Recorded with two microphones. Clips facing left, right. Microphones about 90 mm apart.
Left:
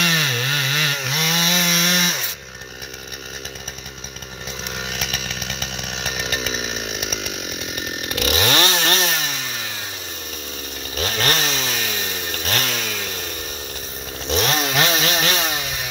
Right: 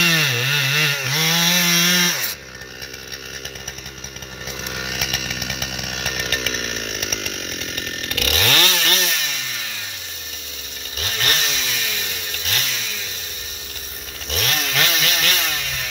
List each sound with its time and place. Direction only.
0.0 s chainsaw: centre (ahead or behind)
4.7 s chainsaw: 5° right (ahead or behind); by 9.4 s 35° left (ahead or behind)
11.0 s chainsaw: 35° left (ahead or behind)
14.2 s chainsaw: 25° left (ahead or behind)